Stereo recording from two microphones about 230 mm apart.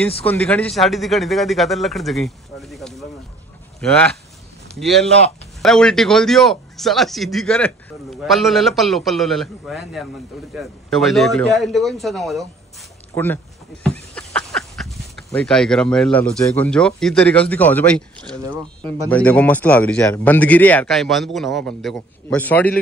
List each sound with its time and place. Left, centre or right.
0.2 s a man's voice: centre
18.4 s speech: centre
18.8 s speech: centre